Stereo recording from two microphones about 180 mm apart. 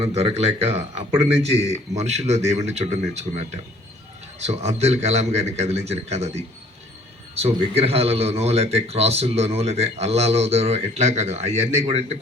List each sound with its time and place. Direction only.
0.0 s speech: 35° right (ahead or behind)